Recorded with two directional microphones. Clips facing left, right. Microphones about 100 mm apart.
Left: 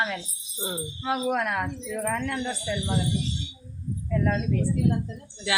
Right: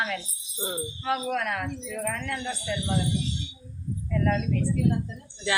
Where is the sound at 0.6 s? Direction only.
5° left (ahead or behind).